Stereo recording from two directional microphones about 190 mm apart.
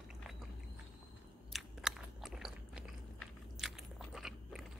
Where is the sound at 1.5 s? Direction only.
Centre (ahead or behind).